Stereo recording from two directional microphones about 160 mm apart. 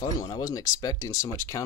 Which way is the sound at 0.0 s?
25° left (ahead or behind).